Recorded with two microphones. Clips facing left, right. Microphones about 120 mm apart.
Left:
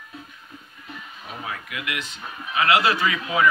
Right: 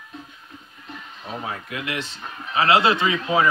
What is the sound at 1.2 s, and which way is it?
Speech, 30° right (ahead or behind).